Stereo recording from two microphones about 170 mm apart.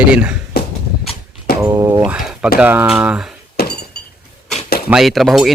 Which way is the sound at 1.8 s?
20° right (ahead or behind).